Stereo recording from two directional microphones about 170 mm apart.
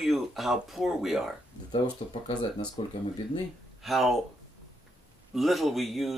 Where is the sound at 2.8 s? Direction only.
30° left (ahead or behind).